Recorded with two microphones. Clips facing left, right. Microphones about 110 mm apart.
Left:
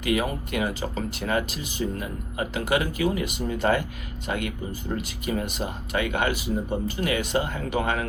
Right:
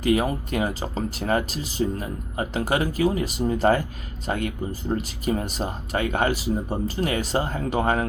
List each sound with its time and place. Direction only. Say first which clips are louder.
0.0 s speech: right 4 dB; 35° right (ahead or behind)